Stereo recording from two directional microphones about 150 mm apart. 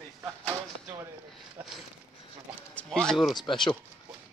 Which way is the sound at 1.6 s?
15° right (ahead or behind).